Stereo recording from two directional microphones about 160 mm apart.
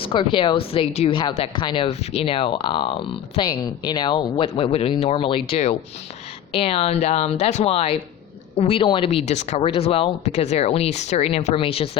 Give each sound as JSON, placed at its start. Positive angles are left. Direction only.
{"t": 0.0, "sound": "speech", "side_deg": 30}
{"t": 9.6, "sound": "speech", "side_deg": 35}